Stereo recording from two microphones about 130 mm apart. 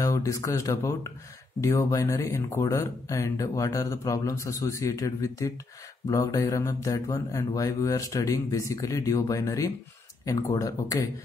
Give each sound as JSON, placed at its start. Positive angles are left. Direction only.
{"t": 0.0, "sound": "speech", "side_deg": 25}